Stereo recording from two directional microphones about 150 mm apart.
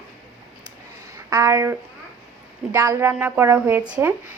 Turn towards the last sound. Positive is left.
turn(degrees=-10)  # may be behind; listen again after turning